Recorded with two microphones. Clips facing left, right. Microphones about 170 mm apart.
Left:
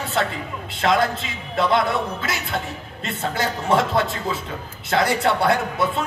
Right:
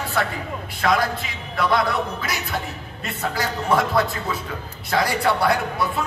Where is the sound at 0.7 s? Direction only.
25° left (ahead or behind).